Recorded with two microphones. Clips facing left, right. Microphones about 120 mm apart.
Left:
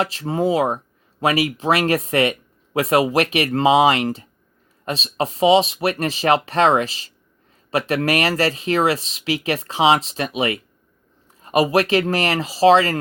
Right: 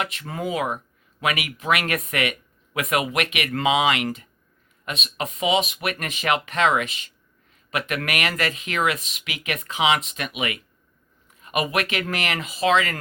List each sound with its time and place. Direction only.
0.0 s speech: 30° left (ahead or behind)